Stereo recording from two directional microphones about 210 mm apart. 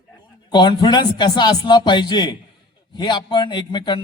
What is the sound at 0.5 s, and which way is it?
A man's voice, 20° left (ahead or behind).